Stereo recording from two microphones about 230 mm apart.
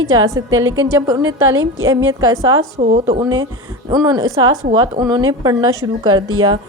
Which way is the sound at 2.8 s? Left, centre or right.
Right.